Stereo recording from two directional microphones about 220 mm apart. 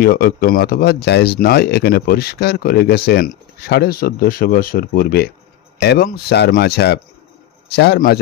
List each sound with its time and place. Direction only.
0.0 s speech: 45° left (ahead or behind)